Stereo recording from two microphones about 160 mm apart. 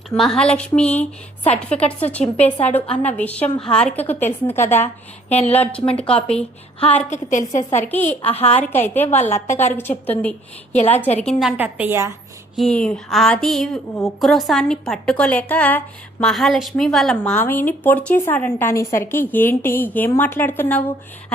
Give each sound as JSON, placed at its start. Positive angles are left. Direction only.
{"t": 0.1, "sound": "a woman's voice", "side_deg": 5}
{"t": 5.3, "sound": "a woman's voice", "side_deg": 40}
{"t": 6.0, "sound": "a woman's voice", "side_deg": 5}
{"t": 7.1, "sound": "a woman's voice", "side_deg": 50}
{"t": 7.8, "sound": "a woman's voice", "side_deg": 10}
{"t": 8.0, "sound": "a woman's voice", "side_deg": 40}
{"t": 8.5, "sound": "a woman's voice", "side_deg": 10}
{"t": 12.5, "sound": "a woman's voice", "side_deg": 5}